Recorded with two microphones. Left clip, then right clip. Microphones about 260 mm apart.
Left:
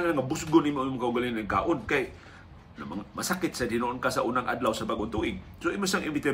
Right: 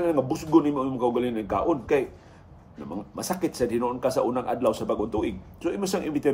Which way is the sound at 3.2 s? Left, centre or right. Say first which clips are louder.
Right 3 dB; left.